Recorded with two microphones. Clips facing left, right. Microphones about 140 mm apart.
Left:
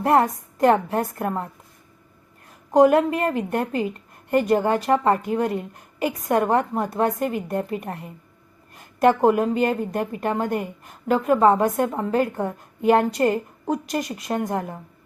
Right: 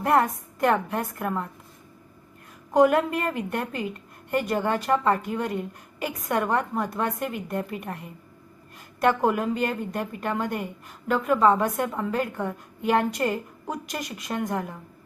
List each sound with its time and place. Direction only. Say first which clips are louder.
0.0 s a woman's voice: left 3 dB; 30° left (ahead or behind)
2.7 s a woman's voice: left 4 dB; 30° left (ahead or behind)